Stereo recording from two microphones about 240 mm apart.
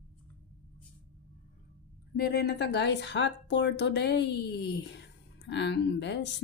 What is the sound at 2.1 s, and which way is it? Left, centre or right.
Speech, left.